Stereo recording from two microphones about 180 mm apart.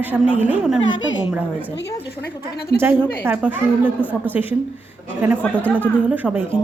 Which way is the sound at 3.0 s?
10° left (ahead or behind).